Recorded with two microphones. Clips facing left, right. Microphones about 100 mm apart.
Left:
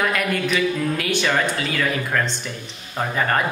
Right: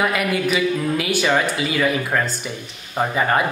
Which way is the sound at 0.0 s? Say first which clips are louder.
Right 2 dB; 5° right (ahead or behind).